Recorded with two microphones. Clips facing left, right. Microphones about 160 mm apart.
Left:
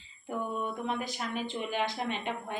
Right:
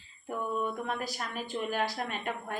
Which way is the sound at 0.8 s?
20° left (ahead or behind).